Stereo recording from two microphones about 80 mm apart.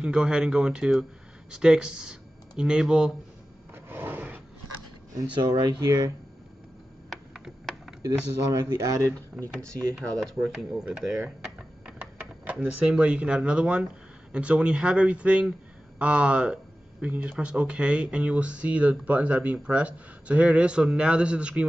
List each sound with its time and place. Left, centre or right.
0.0 s speech: centre
3.7 s a sound: right
5.3 s speech: right
8.5 s speech: right
9.9 s speech: centre